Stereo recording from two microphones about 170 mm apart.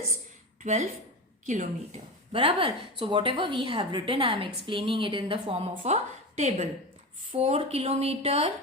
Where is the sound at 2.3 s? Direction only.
35° right (ahead or behind).